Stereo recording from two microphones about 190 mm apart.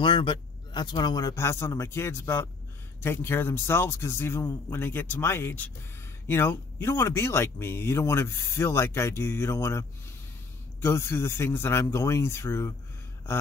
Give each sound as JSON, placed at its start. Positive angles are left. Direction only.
{"t": 0.0, "sound": "speech", "side_deg": 25}